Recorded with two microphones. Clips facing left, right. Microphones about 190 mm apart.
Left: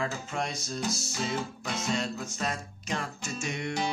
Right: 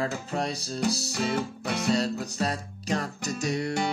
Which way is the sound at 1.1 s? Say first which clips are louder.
Right 4 dB; 65° right (ahead or behind).